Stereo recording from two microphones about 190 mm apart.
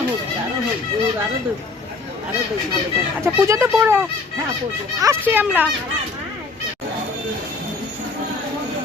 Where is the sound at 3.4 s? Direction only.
15° right (ahead or behind).